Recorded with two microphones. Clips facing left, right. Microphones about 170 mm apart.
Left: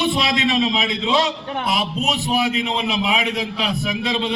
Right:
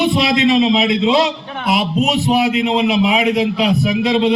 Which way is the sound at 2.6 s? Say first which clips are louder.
Right 7 dB; 30° right (ahead or behind).